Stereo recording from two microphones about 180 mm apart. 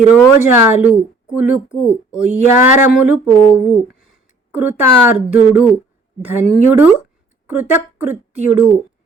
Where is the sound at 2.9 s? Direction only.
5° right (ahead or behind).